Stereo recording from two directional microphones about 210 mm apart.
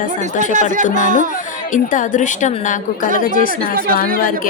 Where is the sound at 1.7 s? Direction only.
35° left (ahead or behind).